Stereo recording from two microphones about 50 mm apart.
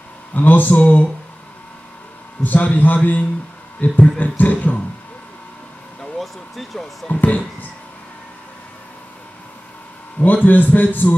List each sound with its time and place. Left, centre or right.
0.3 s a man's voice: left
2.4 s a man's voice: left
6.1 s speech: centre
7.1 s a man's voice: left
10.2 s a man's voice: left